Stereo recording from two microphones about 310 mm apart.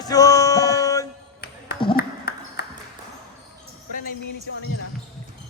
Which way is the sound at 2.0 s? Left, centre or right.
Left.